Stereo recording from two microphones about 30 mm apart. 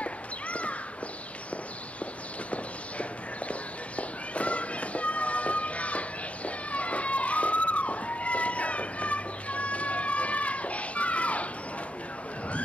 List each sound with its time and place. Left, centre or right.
0.0 s crow: left
2.5 s walk: left